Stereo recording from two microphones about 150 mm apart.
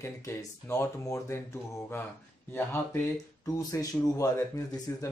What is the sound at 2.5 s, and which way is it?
A man's voice, 15° left (ahead or behind).